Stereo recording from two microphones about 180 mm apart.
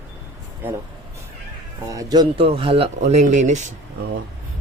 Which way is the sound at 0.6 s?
10° right (ahead or behind).